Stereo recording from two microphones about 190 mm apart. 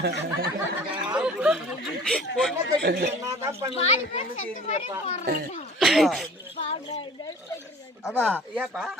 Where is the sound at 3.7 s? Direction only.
35° left (ahead or behind).